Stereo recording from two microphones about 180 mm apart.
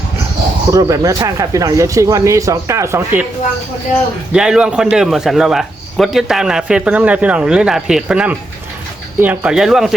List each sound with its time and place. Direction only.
0.7 s speech: 20° right (ahead or behind)
4.3 s a man's voice: 5° right (ahead or behind)